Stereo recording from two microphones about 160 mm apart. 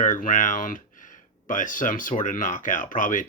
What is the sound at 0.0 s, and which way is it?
Speech, 55° left (ahead or behind).